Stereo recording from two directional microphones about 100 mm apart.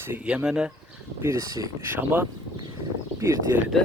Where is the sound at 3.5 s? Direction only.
20° right (ahead or behind).